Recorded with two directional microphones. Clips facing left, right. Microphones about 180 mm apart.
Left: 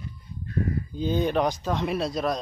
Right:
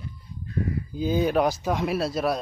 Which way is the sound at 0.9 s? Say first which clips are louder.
Right 2 dB; 5° right (ahead or behind).